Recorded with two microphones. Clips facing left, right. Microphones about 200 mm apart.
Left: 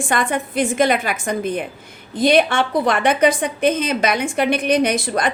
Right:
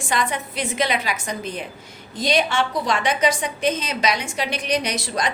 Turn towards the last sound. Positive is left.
turn(degrees=55)  # may be behind; listen again after turning